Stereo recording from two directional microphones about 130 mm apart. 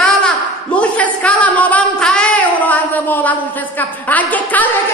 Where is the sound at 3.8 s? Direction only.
15° left (ahead or behind).